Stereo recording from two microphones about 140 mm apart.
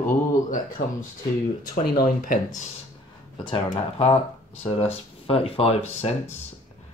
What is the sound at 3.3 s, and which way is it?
Speech, 30° left (ahead or behind).